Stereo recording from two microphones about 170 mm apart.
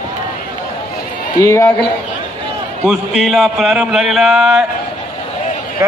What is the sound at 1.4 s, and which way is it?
Speech, 15° left (ahead or behind).